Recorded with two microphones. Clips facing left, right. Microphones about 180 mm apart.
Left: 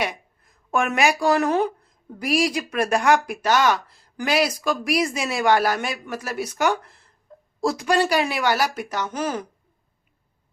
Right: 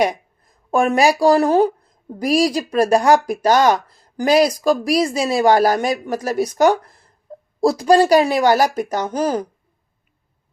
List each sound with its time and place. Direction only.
0.7 s a woman's voice: 35° right (ahead or behind)